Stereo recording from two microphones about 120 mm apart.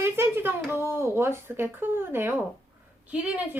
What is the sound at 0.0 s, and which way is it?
Speech, 20° right (ahead or behind).